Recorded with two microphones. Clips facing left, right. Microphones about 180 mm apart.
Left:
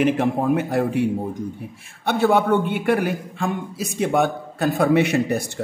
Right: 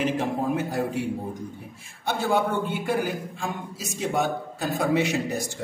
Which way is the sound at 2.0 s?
65° left (ahead or behind).